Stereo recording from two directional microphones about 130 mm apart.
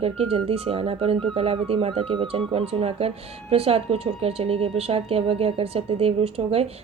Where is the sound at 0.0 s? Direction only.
50° right (ahead or behind).